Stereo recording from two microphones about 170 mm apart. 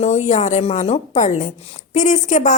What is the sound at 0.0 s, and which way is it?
A woman's voice, 45° left (ahead or behind).